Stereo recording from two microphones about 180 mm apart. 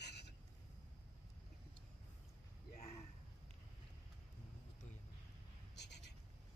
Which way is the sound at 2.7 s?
40° left (ahead or behind).